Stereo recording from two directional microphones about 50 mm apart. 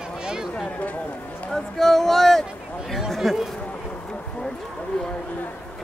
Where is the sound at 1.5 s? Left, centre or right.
Centre.